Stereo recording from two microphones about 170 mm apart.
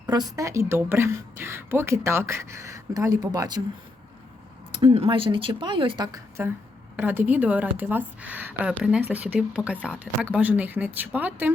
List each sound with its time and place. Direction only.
0.1 s a woman's voice: 25° right (ahead or behind)
4.8 s a woman's voice: 35° right (ahead or behind); by 11.5 s 10° right (ahead or behind)